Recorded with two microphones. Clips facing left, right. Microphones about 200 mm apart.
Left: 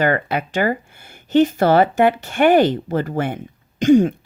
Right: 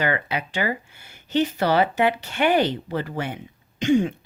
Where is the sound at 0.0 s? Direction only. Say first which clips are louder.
Left 6 dB; 50° left (ahead or behind).